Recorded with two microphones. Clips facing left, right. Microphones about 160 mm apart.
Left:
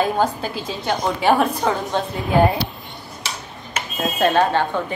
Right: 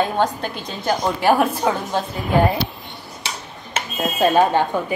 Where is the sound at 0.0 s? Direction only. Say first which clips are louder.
Even; 5° left (ahead or behind).